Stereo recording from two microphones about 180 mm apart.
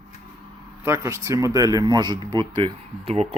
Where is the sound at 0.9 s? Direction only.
15° right (ahead or behind).